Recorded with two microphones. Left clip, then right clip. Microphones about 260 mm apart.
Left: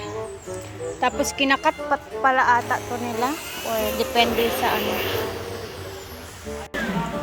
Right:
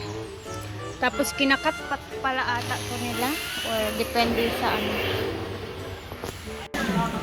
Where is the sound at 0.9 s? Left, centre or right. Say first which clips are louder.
Left 2 dB; centre.